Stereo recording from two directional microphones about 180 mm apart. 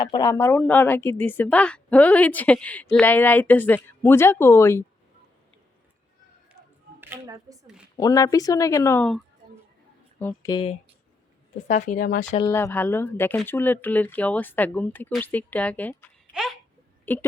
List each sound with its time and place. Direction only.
0.0 s speech: 20° left (ahead or behind)
7.0 s speech: 15° right (ahead or behind)
7.9 s speech: 20° left (ahead or behind)
10.2 s speech: 10° left (ahead or behind)
10.5 s speech: 30° left (ahead or behind)
11.7 s speech: 45° left (ahead or behind)
12.4 s speech: 15° left (ahead or behind)
16.3 s babbling: centre (ahead or behind)
17.1 s speech: 10° left (ahead or behind)